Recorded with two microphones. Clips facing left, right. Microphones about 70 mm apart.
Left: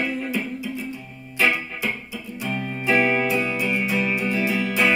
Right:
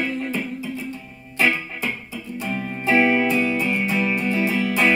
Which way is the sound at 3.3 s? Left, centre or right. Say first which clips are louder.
Right 2 dB; centre.